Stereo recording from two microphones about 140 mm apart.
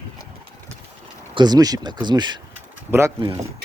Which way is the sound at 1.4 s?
30° right (ahead or behind).